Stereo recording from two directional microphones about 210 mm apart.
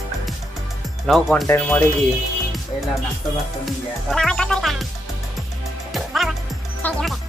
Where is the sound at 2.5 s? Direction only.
Centre (ahead or behind).